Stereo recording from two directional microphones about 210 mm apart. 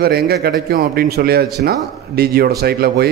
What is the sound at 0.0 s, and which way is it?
A man's voice, 50° right (ahead or behind).